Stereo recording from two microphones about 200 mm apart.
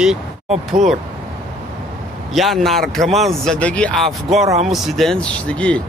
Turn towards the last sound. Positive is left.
turn(degrees=5)  # may be behind; listen again after turning